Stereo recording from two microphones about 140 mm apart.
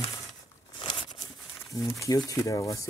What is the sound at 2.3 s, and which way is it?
Speech, 25° left (ahead or behind).